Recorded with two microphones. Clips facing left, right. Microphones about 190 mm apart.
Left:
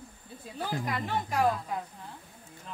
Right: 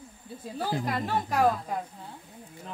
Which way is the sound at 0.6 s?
35° right (ahead or behind).